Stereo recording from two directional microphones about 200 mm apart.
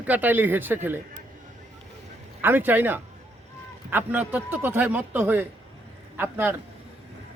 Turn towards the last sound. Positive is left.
turn(degrees=-10)  # may be behind; listen again after turning